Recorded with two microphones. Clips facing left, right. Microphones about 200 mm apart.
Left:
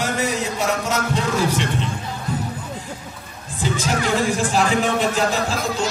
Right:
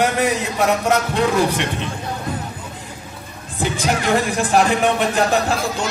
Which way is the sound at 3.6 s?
60° right (ahead or behind).